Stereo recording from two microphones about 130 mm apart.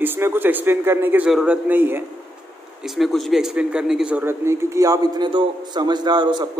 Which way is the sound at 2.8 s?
Centre (ahead or behind).